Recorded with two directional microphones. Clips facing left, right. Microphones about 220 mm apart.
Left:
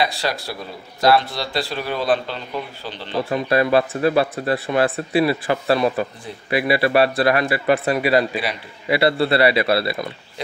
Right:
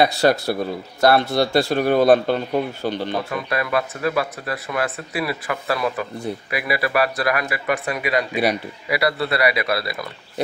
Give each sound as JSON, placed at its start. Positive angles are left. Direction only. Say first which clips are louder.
{"t": 0.0, "sound": "speech", "louder": "right 6 dB", "side_deg": -50}
{"t": 3.3, "sound": "speech", "louder": "left 6 dB", "side_deg": 30}